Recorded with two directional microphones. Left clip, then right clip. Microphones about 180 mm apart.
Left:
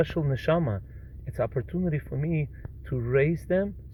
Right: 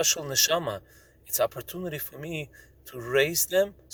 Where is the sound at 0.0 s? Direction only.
30° right (ahead or behind).